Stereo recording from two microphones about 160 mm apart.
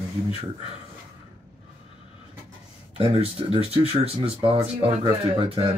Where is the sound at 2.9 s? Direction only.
35° right (ahead or behind).